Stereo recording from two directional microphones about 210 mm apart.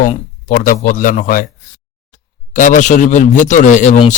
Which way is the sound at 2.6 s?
40° left (ahead or behind).